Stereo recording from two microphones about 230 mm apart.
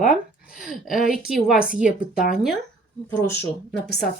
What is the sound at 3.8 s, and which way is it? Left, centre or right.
Speech, left.